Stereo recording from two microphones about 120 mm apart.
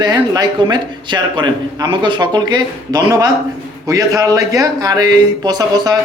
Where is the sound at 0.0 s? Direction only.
35° right (ahead or behind).